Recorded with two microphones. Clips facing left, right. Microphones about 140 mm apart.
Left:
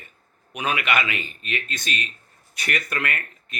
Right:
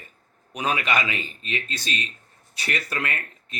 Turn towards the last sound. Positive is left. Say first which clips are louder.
# left 2 dB
turn(degrees=-30)  # may be behind; listen again after turning